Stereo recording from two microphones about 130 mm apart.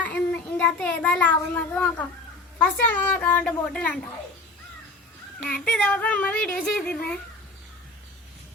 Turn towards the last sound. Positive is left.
turn(degrees=10)  # may be behind; listen again after turning